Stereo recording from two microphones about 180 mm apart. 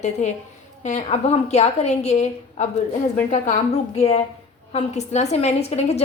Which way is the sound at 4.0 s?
35° left (ahead or behind).